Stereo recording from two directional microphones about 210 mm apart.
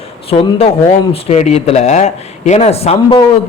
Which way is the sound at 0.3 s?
25° left (ahead or behind).